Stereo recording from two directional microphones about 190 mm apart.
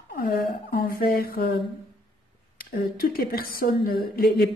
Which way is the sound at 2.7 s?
50° left (ahead or behind).